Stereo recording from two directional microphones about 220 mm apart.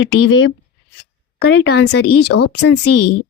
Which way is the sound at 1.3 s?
45° left (ahead or behind).